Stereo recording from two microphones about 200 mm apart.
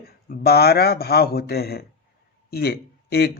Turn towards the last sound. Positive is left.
turn(degrees=50)  # may be behind; listen again after turning